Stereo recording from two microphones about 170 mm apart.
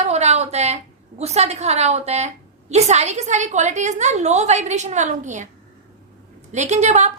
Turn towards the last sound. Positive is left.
turn(degrees=-45)  # may be behind; listen again after turning